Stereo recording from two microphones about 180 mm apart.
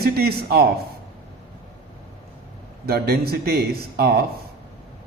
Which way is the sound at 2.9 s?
60° right (ahead or behind).